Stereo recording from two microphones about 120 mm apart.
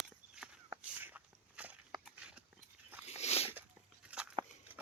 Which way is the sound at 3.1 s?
60° left (ahead or behind).